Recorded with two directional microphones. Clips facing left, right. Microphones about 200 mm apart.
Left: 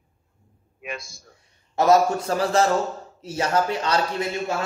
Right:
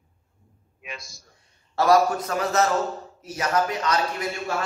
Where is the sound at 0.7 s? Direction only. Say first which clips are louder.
Left 6 dB; 55° left (ahead or behind).